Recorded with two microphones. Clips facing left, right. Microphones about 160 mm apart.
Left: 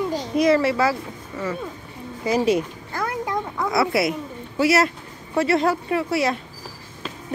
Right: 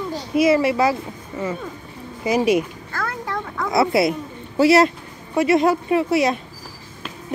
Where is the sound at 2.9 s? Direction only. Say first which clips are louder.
Left 2 dB; 15° left (ahead or behind).